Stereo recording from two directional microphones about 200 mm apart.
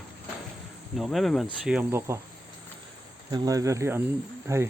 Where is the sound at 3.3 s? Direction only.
15° right (ahead or behind).